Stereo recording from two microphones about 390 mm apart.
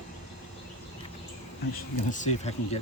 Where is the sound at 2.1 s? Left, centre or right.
Centre.